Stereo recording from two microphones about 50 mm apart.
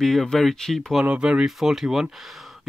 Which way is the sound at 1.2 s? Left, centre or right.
Centre.